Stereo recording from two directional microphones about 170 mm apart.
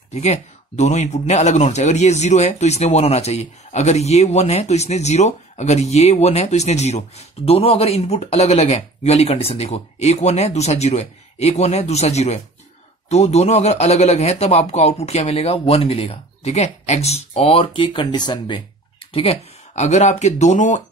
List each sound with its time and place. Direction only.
0.1 s speech: 40° left (ahead or behind)